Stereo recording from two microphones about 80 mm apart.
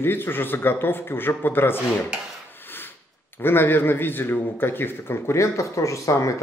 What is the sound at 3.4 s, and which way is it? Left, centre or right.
A man's voice, left.